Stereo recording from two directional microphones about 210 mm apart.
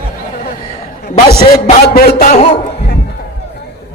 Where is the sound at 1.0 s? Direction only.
45° left (ahead or behind).